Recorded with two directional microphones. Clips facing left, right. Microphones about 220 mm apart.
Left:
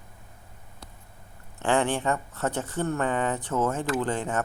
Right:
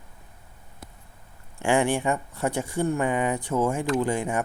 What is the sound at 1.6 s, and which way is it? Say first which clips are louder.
Speech: right 2 dB; 10° right (ahead or behind).